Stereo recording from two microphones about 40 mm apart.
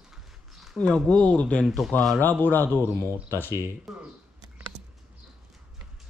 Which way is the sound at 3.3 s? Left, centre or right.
Left.